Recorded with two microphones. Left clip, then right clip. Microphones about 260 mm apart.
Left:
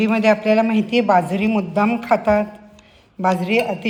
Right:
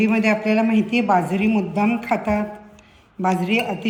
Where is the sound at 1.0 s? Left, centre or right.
Left.